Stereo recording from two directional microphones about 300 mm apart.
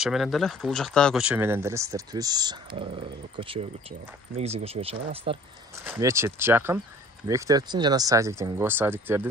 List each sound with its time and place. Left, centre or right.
0.0 s speech: centre